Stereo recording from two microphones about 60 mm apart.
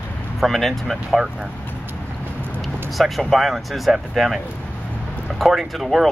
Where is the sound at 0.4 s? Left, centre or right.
Centre.